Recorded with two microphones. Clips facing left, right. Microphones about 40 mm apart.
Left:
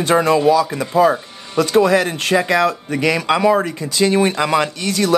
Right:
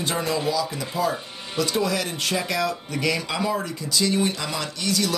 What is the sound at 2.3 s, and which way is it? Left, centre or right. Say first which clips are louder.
Speech: left 11 dB; left.